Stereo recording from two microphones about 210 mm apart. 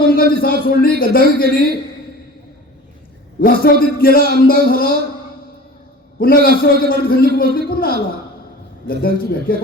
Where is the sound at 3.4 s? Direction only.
45° left (ahead or behind).